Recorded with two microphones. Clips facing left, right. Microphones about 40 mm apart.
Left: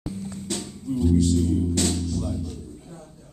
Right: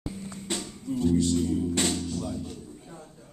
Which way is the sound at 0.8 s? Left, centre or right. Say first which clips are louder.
Left 3 dB; centre.